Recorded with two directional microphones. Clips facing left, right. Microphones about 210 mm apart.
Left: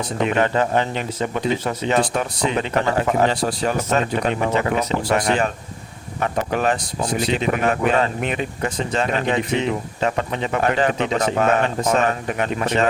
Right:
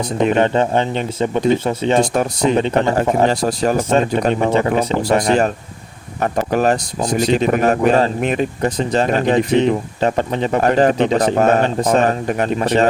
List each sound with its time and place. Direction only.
0.2 s speech: 30° right (ahead or behind)
3.2 s speech: 40° right (ahead or behind)